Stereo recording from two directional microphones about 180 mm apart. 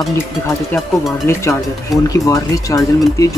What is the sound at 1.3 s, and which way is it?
Speech, 15° left (ahead or behind).